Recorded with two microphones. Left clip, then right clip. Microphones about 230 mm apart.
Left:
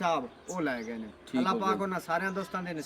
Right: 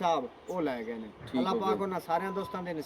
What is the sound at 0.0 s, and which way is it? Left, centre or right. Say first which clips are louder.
Speech: right 1 dB; left.